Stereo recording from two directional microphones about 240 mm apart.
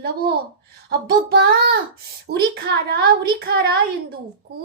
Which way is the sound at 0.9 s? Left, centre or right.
Right.